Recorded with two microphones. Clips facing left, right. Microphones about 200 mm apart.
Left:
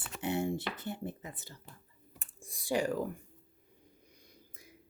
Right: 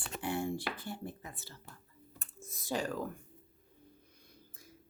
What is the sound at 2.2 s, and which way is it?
Computer keyboard, 15° left (ahead or behind).